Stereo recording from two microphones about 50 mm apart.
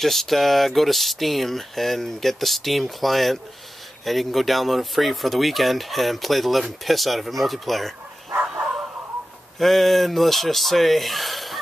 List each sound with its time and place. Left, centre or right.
0.0 s speech: centre
9.6 s speech: centre